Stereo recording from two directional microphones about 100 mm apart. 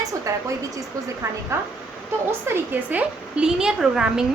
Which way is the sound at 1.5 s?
30° right (ahead or behind).